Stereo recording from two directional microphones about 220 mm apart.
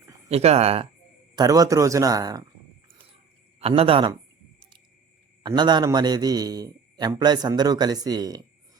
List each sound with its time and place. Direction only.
0.3 s speech: 30° right (ahead or behind)
1.4 s a man's voice: 15° right (ahead or behind)
3.6 s speech: 25° right (ahead or behind)
5.4 s a man's voice: 20° right (ahead or behind)